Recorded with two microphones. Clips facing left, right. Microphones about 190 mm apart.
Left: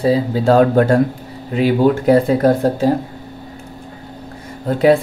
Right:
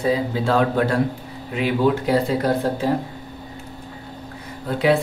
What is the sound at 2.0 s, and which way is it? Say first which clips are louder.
Speech: left 7 dB; 50° left (ahead or behind).